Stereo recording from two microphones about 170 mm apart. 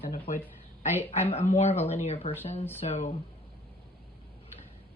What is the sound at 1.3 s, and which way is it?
A woman's voice, 35° left (ahead or behind).